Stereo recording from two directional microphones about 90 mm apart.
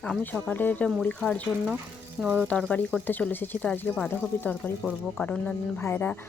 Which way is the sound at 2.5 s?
15° left (ahead or behind).